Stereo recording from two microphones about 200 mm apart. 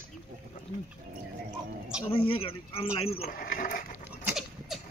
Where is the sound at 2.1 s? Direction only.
25° left (ahead or behind).